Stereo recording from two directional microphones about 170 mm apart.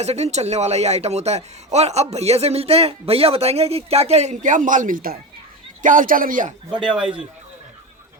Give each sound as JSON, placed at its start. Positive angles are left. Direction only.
{"t": 0.0, "sound": "a man's voice", "side_deg": -40}
{"t": 6.7, "sound": "speech", "side_deg": -5}